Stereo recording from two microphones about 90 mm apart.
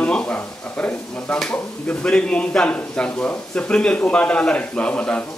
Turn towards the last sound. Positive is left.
turn(degrees=10)  # may be behind; listen again after turning